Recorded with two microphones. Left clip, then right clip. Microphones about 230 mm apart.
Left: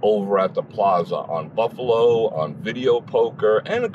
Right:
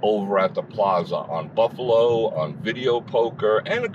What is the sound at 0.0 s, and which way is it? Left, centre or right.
Speech, left.